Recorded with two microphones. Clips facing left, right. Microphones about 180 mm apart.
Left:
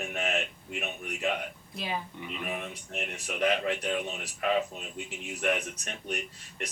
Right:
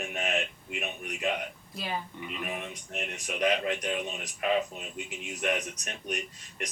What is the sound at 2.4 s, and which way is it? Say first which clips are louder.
Speech: left 2 dB; 15° right (ahead or behind).